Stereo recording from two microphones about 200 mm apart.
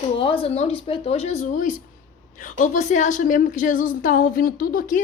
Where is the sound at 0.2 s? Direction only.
25° left (ahead or behind).